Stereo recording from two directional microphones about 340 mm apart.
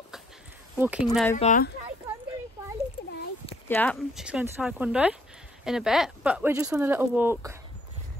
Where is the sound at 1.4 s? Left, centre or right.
Left.